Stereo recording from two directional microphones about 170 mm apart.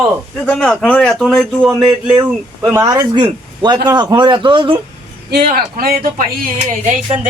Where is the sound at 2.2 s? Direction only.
20° right (ahead or behind).